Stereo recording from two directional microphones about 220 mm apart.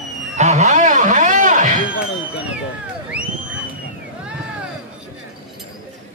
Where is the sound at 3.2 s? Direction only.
5° right (ahead or behind).